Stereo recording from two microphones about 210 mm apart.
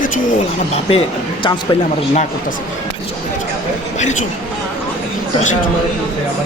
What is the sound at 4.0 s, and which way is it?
Speech, 35° left (ahead or behind).